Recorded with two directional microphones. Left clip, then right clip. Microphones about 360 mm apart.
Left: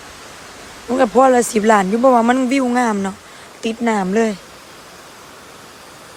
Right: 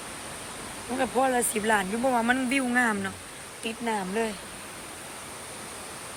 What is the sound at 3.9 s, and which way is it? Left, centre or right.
Speech, left.